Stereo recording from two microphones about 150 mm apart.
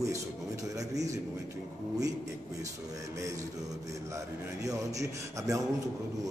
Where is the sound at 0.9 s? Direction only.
20° right (ahead or behind).